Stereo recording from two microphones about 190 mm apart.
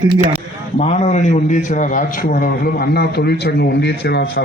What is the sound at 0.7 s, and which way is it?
A man's voice, 35° left (ahead or behind).